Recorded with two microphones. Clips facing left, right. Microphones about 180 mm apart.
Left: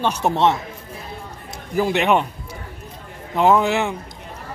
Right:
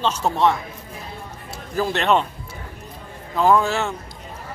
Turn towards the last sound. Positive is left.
turn(degrees=20)  # may be behind; listen again after turning